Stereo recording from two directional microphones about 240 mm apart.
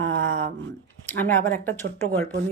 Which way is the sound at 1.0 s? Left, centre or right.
Centre.